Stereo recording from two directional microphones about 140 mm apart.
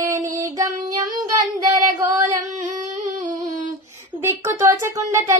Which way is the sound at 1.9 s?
25° right (ahead or behind).